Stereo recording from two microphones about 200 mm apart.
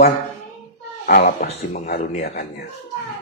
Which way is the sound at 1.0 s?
45° left (ahead or behind).